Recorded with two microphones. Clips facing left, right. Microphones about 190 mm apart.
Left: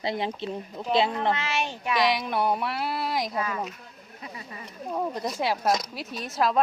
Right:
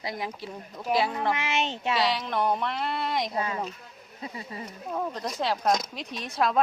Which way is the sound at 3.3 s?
30° right (ahead or behind).